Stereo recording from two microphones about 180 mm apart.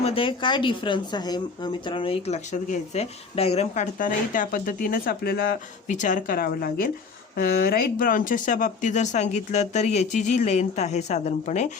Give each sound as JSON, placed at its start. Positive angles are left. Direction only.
{"t": 0.0, "sound": "speech", "side_deg": 30}